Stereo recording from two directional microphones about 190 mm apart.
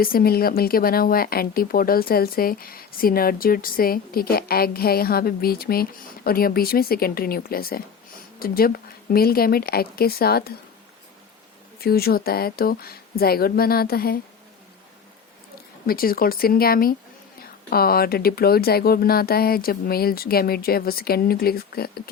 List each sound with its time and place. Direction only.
0.0 s speech: 50° left (ahead or behind)
11.8 s speech: 55° left (ahead or behind)
15.9 s speech: 50° left (ahead or behind)